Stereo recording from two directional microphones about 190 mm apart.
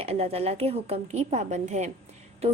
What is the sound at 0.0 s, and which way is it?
A woman's voice, 30° right (ahead or behind).